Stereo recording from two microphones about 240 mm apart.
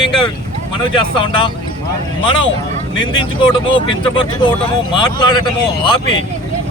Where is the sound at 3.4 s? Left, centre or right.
Centre.